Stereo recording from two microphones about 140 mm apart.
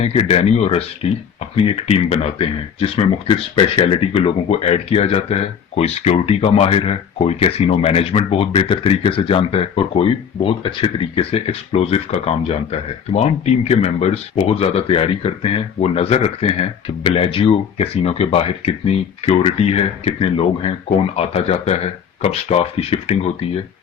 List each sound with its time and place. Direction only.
0.0 s speech: 45° left (ahead or behind)